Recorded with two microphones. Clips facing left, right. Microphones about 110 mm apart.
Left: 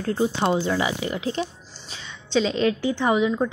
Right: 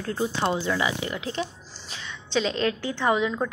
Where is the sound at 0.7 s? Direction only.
30° left (ahead or behind).